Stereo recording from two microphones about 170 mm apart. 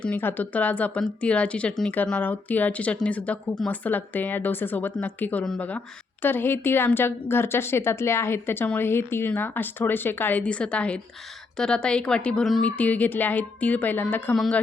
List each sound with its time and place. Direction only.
0.0 s speech: 10° left (ahead or behind)